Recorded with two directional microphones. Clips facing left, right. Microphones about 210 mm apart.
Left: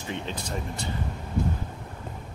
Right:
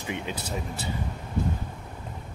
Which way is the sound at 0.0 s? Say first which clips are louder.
Right 1 dB; 10° right (ahead or behind).